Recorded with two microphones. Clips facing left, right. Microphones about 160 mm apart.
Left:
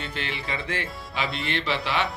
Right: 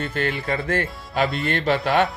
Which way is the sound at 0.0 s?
50° right (ahead or behind).